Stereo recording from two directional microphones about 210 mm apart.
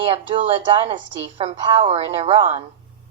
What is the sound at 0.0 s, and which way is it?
A woman's voice, 25° right (ahead or behind).